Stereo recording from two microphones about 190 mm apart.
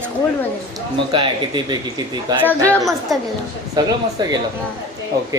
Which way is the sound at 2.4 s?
10° left (ahead or behind).